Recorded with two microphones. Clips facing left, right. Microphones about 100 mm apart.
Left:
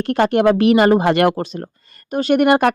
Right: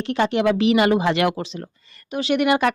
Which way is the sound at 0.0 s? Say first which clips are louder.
Left 5 dB; 50° left (ahead or behind).